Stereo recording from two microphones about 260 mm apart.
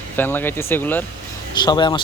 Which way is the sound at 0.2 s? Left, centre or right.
Centre.